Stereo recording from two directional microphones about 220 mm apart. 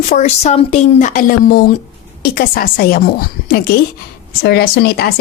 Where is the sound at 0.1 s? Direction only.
30° left (ahead or behind).